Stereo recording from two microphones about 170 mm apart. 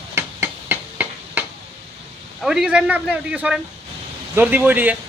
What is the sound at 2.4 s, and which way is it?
A man's voice, 5° right (ahead or behind).